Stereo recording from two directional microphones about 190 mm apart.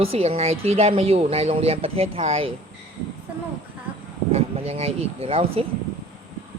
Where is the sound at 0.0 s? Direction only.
30° right (ahead or behind).